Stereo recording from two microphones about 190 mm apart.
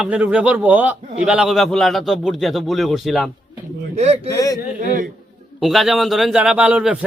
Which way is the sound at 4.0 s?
35° right (ahead or behind).